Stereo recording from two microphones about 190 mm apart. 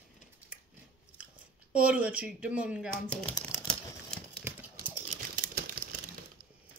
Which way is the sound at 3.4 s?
5° left (ahead or behind).